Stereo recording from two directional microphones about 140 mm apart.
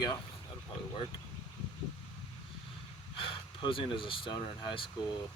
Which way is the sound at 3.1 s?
40° left (ahead or behind).